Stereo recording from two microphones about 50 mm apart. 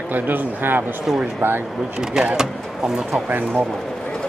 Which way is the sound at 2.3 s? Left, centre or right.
Centre.